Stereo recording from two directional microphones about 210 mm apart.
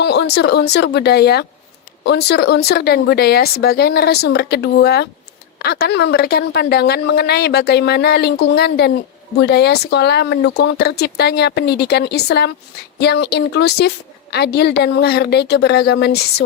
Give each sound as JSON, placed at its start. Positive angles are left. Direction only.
{"t": 0.0, "sound": "a woman's voice", "side_deg": 55}